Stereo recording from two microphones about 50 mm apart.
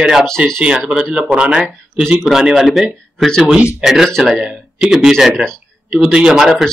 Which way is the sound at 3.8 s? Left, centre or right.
Centre.